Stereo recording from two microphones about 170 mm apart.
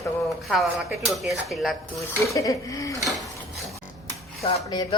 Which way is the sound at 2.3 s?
20° left (ahead or behind).